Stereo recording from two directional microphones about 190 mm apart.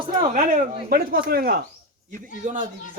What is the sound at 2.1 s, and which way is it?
Speech, 40° right (ahead or behind).